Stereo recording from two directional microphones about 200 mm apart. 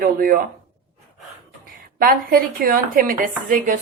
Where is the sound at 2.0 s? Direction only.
45° right (ahead or behind).